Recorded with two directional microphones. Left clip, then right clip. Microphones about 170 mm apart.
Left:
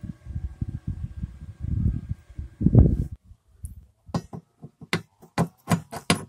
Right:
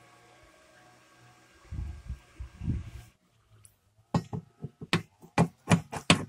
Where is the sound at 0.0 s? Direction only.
40° left (ahead or behind).